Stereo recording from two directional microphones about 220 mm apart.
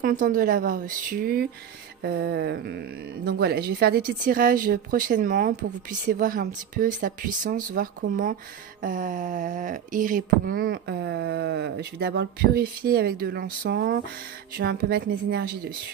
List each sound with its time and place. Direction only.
0.0 s speech: 35° right (ahead or behind)